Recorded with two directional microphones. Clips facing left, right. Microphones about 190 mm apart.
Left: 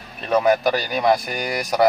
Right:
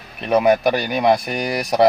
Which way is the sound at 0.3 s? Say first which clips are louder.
Right 2 dB; 15° right (ahead or behind).